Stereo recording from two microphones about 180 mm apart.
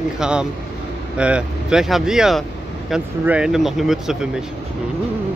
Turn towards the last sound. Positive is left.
turn(degrees=0)  # may be behind; listen again after turning